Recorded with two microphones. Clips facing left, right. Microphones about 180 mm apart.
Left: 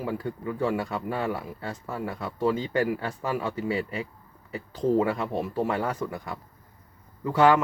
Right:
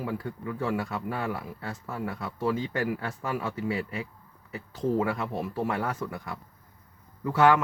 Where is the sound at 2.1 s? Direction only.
25° left (ahead or behind).